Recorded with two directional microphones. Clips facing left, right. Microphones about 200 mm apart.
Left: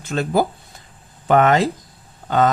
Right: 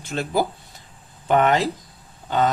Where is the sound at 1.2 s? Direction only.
90° left.